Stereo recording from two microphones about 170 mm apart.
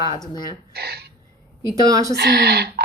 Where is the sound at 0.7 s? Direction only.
65° right (ahead or behind).